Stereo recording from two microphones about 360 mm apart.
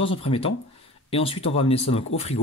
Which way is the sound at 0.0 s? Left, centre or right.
Centre.